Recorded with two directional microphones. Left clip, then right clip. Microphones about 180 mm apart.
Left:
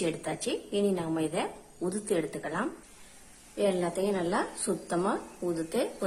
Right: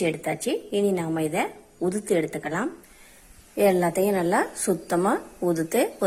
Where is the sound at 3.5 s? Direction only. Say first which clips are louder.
Right 8 dB; 35° right (ahead or behind).